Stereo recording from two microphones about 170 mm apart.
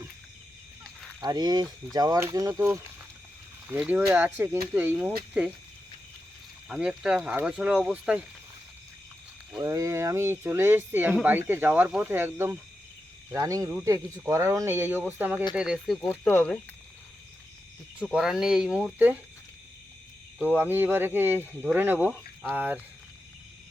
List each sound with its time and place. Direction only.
1.2 s speech: 25° right (ahead or behind)
6.7 s speech: 5° right (ahead or behind)
9.6 s speech: 15° right (ahead or behind)
16.0 s speech: 15° left (ahead or behind)
18.1 s speech: centre (ahead or behind)
20.6 s speech: 10° right (ahead or behind)